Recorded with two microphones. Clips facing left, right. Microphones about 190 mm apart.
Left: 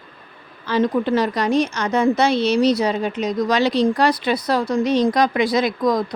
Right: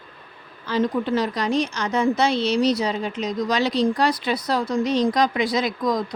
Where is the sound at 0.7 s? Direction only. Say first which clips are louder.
Left 3 dB; 70° left (ahead or behind).